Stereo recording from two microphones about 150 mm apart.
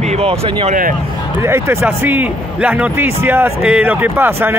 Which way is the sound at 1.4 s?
15° right (ahead or behind).